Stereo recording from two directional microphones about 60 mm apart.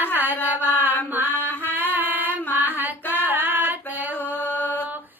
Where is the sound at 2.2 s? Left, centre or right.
Left.